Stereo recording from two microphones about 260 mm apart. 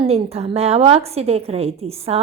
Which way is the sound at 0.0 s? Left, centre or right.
Right.